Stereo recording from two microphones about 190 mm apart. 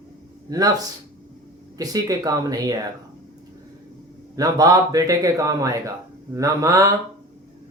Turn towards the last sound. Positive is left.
turn(degrees=-15)  # may be behind; listen again after turning